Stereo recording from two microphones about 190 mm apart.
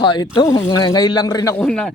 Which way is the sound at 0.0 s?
25° left (ahead or behind).